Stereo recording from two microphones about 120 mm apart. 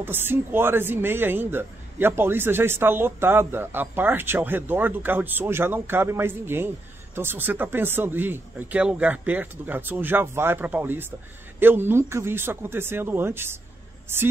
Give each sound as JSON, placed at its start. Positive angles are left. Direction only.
{"t": 0.0, "sound": "speech", "side_deg": -20}